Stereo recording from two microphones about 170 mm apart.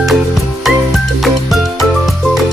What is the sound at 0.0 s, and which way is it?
Music, centre (ahead or behind).